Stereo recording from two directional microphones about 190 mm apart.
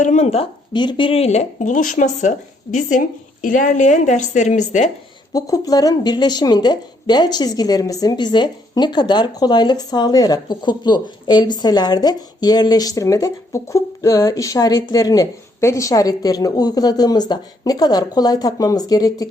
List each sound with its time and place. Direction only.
0.0 s speech: 40° left (ahead or behind)
5.3 s speech: 20° left (ahead or behind)